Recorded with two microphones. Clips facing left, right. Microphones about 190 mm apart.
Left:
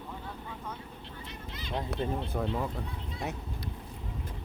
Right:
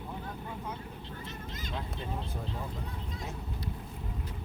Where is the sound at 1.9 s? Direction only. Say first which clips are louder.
Left 6 dB; 65° left (ahead or behind).